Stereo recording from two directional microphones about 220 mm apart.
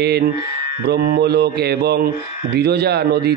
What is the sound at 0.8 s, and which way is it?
Speech, 45° right (ahead or behind).